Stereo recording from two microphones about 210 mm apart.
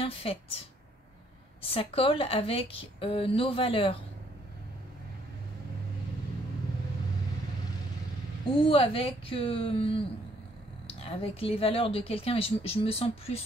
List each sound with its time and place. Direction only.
0.0 s speech: 25° left (ahead or behind)
1.6 s a woman's voice: 25° left (ahead or behind)
8.6 s a woman's voice: 25° left (ahead or behind)